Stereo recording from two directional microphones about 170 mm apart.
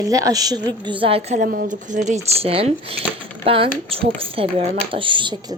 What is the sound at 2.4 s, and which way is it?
Speech, 35° right (ahead or behind).